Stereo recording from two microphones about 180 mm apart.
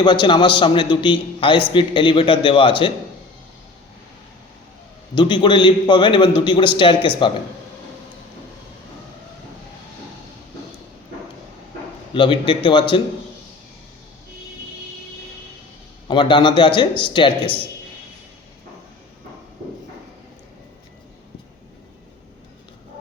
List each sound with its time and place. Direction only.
0.0 s a man's voice: 25° left (ahead or behind)
5.1 s a man's voice: 25° left (ahead or behind)
12.1 s a man's voice: 30° left (ahead or behind)
16.0 s a man's voice: 25° left (ahead or behind)